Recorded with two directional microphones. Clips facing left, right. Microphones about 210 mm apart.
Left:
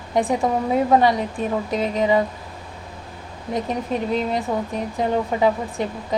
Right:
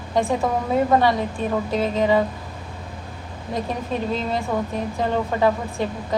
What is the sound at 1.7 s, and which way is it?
Speech, 15° left (ahead or behind).